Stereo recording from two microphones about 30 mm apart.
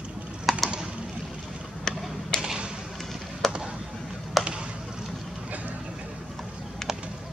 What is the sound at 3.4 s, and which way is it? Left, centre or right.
Chop, centre.